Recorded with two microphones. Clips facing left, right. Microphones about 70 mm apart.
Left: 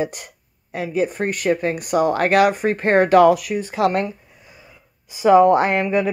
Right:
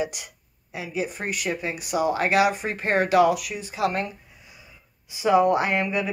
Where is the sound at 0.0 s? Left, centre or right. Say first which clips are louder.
Left 4 dB; left.